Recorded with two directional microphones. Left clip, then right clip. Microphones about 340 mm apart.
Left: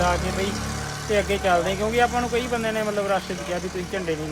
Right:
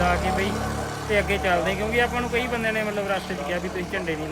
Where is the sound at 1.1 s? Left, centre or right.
Centre.